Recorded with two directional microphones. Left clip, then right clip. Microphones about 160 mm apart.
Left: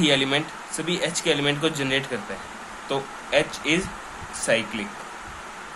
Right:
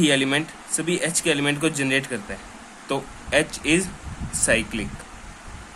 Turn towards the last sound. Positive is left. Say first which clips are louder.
# right 1 dB
turn(degrees=-50)  # may be behind; listen again after turning